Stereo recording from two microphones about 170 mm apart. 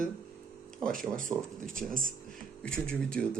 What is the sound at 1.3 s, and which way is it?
Speech, 30° right (ahead or behind).